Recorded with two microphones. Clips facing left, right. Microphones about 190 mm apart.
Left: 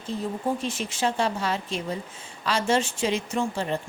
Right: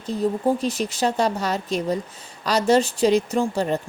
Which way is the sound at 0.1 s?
35° right (ahead or behind).